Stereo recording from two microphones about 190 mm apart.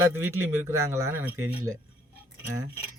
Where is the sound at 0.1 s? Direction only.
15° right (ahead or behind).